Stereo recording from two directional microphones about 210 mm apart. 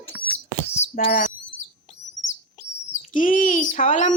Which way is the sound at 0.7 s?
35° left (ahead or behind).